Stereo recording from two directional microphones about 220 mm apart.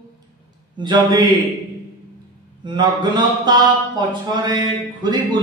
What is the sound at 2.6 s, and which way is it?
A man's voice, 20° right (ahead or behind).